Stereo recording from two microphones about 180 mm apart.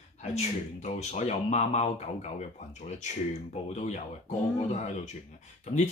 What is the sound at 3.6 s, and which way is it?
Speech, 40° left (ahead or behind).